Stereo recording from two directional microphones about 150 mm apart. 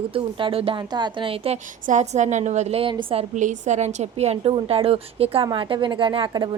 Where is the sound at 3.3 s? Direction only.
55° right (ahead or behind).